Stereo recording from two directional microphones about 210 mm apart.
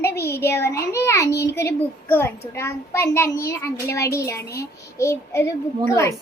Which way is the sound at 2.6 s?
10° left (ahead or behind).